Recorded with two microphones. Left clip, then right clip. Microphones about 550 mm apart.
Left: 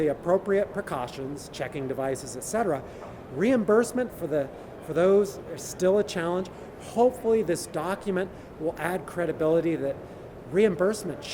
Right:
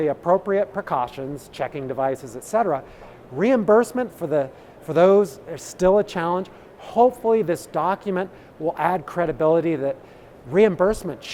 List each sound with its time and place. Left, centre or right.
0.0 s speech: right